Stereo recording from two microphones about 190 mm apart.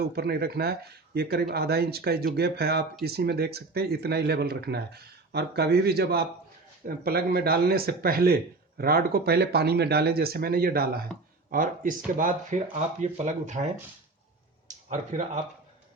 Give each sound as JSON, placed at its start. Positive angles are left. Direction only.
{"t": 0.0, "sound": "speech", "side_deg": -55}